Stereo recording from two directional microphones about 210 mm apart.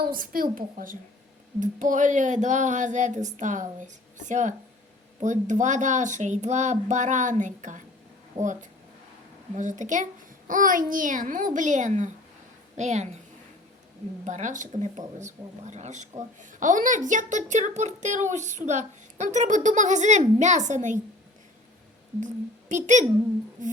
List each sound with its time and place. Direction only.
0.0 s speech: 45° right (ahead or behind)
8.4 s a woman's voice: 15° right (ahead or behind)
9.6 s speech: 35° right (ahead or behind)
14.3 s speech: 35° right (ahead or behind)
22.7 s speech: 35° right (ahead or behind)
23.6 s a sound: 35° right (ahead or behind)